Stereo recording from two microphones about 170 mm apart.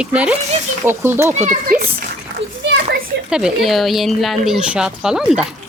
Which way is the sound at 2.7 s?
65° right (ahead or behind).